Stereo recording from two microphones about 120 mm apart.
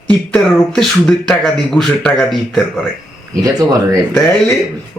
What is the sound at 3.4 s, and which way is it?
Speech, 30° right (ahead or behind).